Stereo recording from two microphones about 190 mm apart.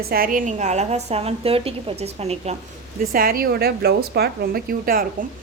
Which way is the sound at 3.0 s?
50° right (ahead or behind).